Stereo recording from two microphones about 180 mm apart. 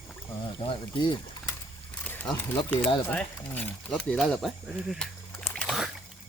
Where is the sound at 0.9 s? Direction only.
30° left (ahead or behind).